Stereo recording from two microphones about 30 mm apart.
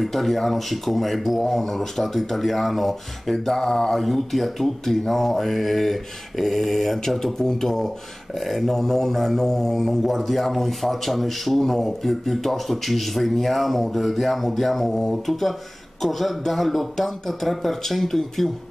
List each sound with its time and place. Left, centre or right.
0.0 s a man's voice: centre
4.0 s a man's voice: centre
7.3 s mantra: centre
10.0 s a man's voice: centre